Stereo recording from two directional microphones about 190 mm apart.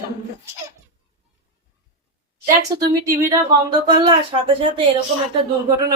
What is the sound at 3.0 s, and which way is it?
Speech, 15° right (ahead or behind).